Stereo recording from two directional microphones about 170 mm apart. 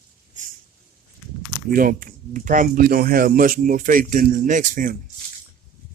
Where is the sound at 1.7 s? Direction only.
55° right (ahead or behind).